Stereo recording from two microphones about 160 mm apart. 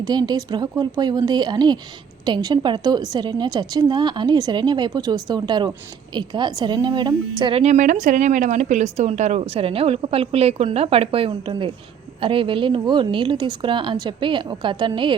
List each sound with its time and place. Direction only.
0.0 s a woman's voice: 25° right (ahead or behind)
7.6 s speech: 50° right (ahead or behind); by 15.1 s 30° right (ahead or behind)